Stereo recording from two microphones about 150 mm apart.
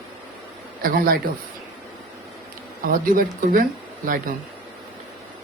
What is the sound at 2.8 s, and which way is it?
Speech, 70° right (ahead or behind).